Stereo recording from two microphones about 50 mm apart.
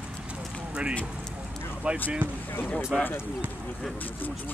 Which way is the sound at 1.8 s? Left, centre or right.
Right.